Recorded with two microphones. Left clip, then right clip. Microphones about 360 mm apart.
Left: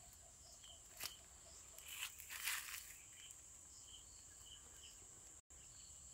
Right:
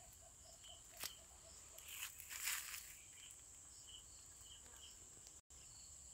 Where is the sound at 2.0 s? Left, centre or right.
Centre.